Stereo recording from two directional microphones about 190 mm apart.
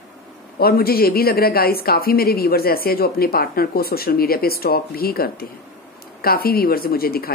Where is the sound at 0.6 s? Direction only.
55° left (ahead or behind).